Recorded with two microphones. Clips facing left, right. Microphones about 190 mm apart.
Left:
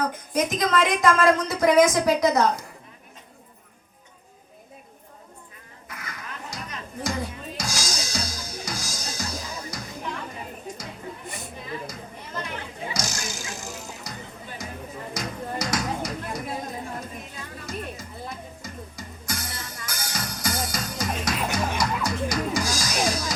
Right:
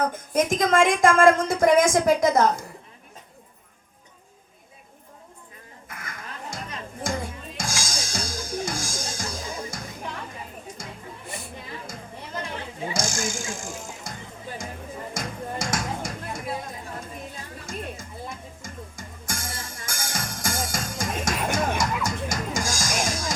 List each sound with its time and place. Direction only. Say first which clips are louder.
0.0 s a woman's voice: right 2 dB; 50° right (ahead or behind)
5.9 s children playing: left 1 dB; 50° right (ahead or behind)
7.0 s music: left 1 dB; 50° right (ahead or behind)
12.9 s a sound: right 5 dB; 50° right (ahead or behind)
15.1 s music: left 2 dB; 50° right (ahead or behind)
17.7 s music: even; 50° right (ahead or behind)